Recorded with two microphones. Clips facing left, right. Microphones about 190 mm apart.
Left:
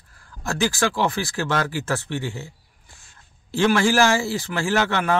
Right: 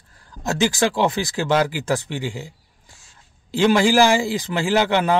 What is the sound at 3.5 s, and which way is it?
Speech, 15° right (ahead or behind).